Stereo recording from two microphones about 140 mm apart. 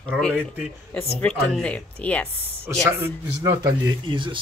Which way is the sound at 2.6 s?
20° right (ahead or behind).